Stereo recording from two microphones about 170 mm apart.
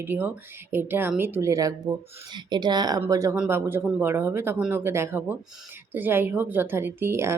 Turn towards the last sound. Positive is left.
turn(degrees=-15)  # may be behind; listen again after turning